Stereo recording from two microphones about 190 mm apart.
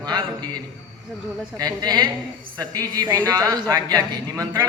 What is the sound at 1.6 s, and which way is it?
A man's voice, 20° right (ahead or behind).